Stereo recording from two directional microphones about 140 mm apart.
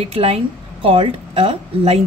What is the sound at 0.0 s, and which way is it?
Speech, 45° right (ahead or behind).